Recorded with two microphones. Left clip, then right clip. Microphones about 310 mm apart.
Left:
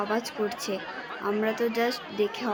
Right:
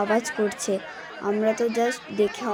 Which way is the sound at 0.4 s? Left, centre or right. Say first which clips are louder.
Right 4 dB; centre.